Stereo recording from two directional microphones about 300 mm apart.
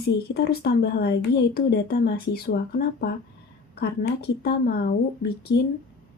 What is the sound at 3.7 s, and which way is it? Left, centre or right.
Speech, left.